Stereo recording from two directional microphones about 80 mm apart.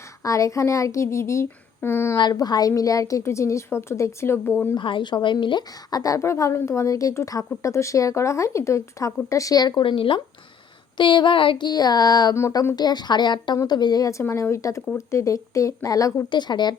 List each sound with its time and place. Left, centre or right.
0.2 s a woman's voice: left
2.3 s a woman's voice: left
4.7 s speech: left
5.9 s a woman's voice: left
10.9 s a sound: left
12.3 s a woman's voice: left
12.7 s a woman's voice: left
16.3 s a woman's voice: left